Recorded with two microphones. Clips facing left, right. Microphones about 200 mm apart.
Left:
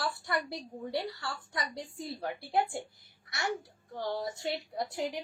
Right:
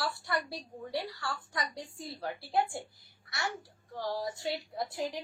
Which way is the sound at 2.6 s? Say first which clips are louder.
Even; 20° left (ahead or behind).